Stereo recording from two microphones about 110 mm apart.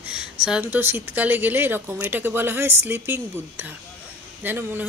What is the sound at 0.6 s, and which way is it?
Speech, 20° right (ahead or behind).